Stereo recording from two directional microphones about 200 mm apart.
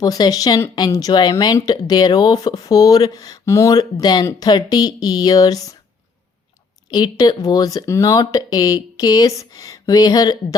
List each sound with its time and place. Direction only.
0.0 s speech: 20° left (ahead or behind)
6.9 s speech: 20° left (ahead or behind)